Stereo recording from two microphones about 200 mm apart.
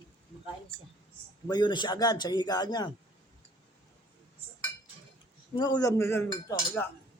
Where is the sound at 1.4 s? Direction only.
20° left (ahead or behind).